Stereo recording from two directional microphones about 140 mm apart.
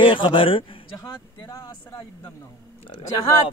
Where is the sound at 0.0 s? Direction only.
35° left (ahead or behind).